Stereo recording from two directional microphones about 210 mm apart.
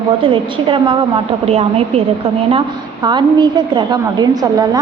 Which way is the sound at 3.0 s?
20° right (ahead or behind).